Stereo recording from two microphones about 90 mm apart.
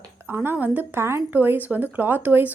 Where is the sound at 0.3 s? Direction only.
20° right (ahead or behind).